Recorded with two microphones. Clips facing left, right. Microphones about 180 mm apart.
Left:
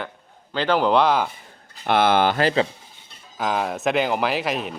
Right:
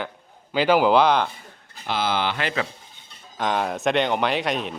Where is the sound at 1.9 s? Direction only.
60° left (ahead or behind); by 2.6 s 35° left (ahead or behind).